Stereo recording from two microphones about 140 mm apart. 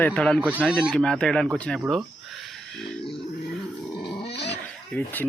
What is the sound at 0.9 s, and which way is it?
Speech, 5° left (ahead or behind).